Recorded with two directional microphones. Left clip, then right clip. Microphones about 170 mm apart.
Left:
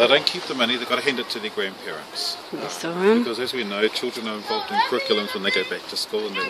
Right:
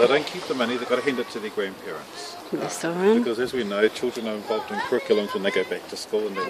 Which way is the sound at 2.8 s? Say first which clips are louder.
Left 2 dB; centre (ahead or behind).